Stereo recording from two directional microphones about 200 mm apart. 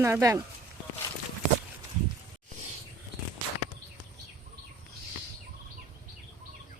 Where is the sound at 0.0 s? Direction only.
15° right (ahead or behind).